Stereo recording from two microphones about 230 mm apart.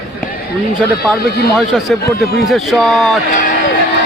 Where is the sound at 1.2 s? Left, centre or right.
Left.